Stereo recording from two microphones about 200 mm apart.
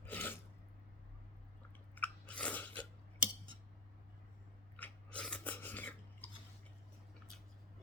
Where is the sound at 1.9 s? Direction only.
5° left (ahead or behind).